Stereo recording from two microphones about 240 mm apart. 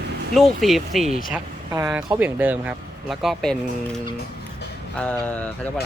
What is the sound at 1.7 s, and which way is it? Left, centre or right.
Speech, centre.